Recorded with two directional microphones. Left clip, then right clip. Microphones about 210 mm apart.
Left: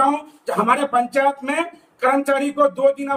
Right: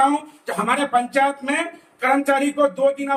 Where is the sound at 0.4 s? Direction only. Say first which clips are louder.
Left 4 dB; 25° left (ahead or behind).